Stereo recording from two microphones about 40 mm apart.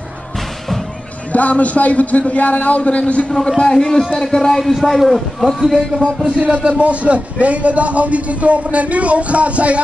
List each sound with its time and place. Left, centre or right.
1.3 s a man's voice: left
3.3 s a man's voice: centre
6.2 s speech: right